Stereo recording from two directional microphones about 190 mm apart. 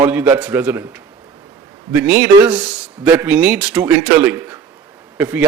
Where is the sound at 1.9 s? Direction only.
10° right (ahead or behind).